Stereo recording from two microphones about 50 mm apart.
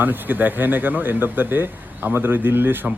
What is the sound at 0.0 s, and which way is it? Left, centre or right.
A man's voice, right.